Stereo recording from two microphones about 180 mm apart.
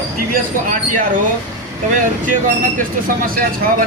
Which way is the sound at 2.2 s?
45° right (ahead or behind).